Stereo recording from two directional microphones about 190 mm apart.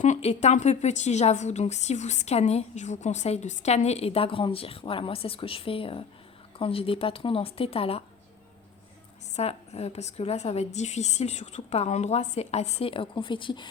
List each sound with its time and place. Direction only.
0.0 s a woman's voice: 35° left (ahead or behind)
9.3 s a woman's voice: 35° left (ahead or behind)